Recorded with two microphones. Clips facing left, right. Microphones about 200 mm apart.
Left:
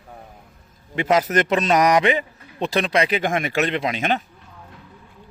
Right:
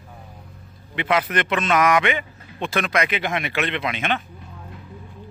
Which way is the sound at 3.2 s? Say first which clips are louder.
Left 3 dB; 45° left (ahead or behind).